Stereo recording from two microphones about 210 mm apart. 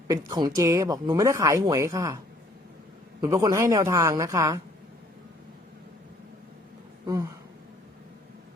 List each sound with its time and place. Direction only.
0.1 s speech: 20° right (ahead or behind)